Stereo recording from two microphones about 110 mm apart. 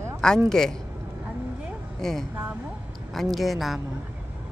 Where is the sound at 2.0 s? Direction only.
5° left (ahead or behind).